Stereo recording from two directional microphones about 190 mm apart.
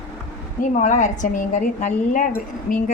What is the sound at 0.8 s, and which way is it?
A woman's voice, 40° left (ahead or behind).